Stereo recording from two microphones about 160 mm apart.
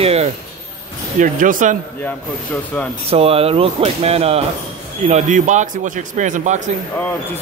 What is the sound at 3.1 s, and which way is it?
Speech, 40° right (ahead or behind).